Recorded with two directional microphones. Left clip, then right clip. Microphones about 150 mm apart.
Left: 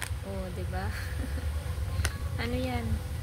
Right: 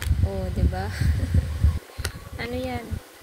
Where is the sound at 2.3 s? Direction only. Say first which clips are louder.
Right 5 dB; 20° right (ahead or behind).